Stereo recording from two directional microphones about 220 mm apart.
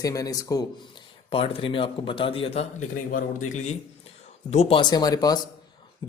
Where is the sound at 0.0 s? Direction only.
15° left (ahead or behind).